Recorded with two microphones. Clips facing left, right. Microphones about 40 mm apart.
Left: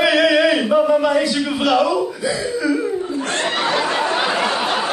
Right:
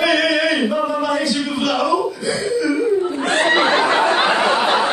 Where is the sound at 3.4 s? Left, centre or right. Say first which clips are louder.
Right 6 dB; right.